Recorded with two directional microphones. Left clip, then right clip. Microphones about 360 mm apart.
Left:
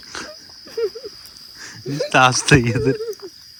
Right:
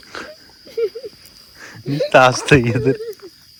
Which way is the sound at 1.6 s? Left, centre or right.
Centre.